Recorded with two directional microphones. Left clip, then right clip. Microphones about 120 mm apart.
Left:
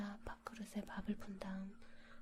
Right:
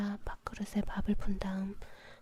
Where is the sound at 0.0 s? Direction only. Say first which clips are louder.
Right 9 dB; 30° right (ahead or behind).